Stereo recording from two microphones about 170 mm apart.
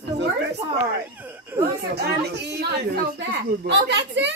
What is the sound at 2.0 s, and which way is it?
Speech, 75° right (ahead or behind).